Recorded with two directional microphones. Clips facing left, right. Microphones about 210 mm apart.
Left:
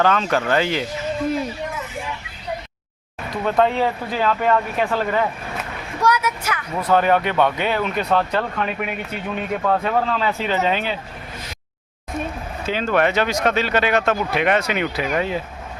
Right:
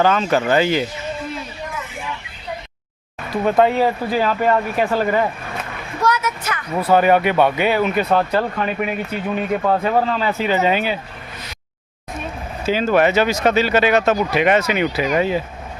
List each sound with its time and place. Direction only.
0.0 s speech: 5° right (ahead or behind)
3.2 s speech: 10° right (ahead or behind)
6.0 s a woman's voice: 10° left (ahead or behind)
6.7 s speech: 10° right (ahead or behind)
12.6 s speech: 5° right (ahead or behind)